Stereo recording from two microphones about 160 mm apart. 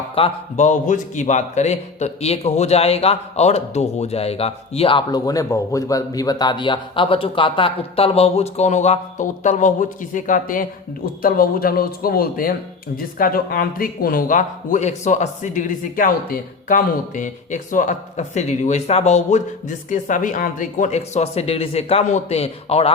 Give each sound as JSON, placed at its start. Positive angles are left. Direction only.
{"t": 0.2, "sound": "a man's voice", "side_deg": 50}